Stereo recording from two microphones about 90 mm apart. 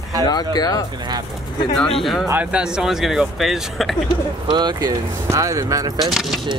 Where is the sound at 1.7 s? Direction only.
5° left (ahead or behind).